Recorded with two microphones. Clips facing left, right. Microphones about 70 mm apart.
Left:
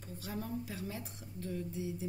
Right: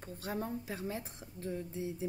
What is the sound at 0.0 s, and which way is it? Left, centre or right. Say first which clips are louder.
A woman's voice: right 3 dB; right.